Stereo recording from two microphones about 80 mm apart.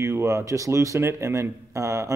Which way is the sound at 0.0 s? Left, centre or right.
Right.